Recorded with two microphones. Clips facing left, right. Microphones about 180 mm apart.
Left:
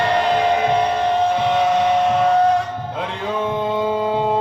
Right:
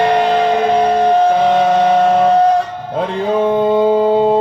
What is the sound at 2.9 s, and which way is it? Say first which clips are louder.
Music: right 10 dB; 40° right (ahead or behind).